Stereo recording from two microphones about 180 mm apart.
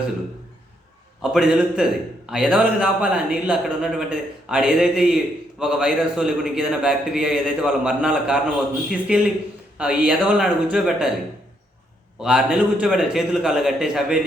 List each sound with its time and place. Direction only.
1.2 s a man's voice: 5° right (ahead or behind)
12.2 s a man's voice: 5° right (ahead or behind)